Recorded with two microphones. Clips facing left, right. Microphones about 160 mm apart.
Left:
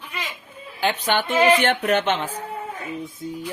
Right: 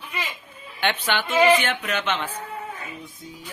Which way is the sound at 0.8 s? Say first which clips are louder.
Left 3 dB; 40° left (ahead or behind).